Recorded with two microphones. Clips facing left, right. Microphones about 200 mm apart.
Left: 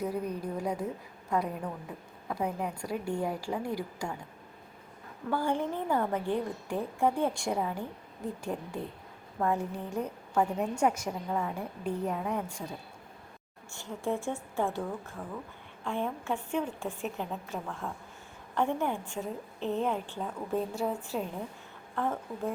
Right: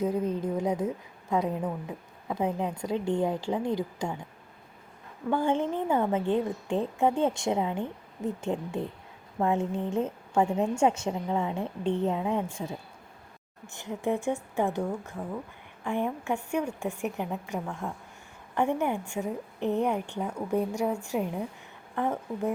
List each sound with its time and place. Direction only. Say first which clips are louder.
0.0 s a woman's voice: right 5 dB; 20° right (ahead or behind)
5.3 s a woman's voice: right 4 dB; 20° right (ahead or behind)